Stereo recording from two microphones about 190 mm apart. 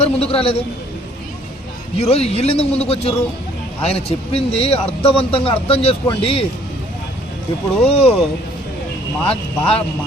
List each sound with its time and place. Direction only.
0.0 s a man's voice: 30° left (ahead or behind)
2.0 s a man's voice: 35° left (ahead or behind)
7.8 s a man's voice: 30° left (ahead or behind)
9.2 s speech: 30° left (ahead or behind)